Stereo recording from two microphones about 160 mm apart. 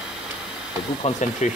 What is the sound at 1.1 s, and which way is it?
Speech, 45° left (ahead or behind).